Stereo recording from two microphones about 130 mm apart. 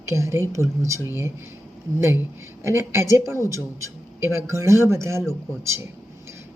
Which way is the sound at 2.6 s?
20° right (ahead or behind).